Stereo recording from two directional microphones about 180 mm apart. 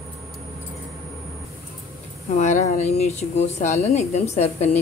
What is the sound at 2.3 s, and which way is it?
Speech, 40° left (ahead or behind).